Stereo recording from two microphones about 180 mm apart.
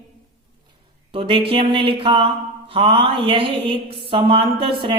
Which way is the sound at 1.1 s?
30° right (ahead or behind).